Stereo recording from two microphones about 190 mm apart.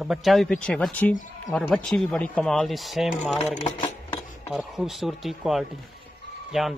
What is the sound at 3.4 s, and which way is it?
Speech, 35° left (ahead or behind).